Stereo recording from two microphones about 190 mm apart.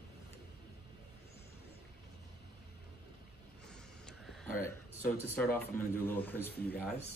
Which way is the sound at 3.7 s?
Centre (ahead or behind).